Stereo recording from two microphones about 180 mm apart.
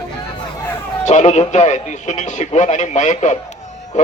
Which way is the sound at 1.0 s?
40° left (ahead or behind).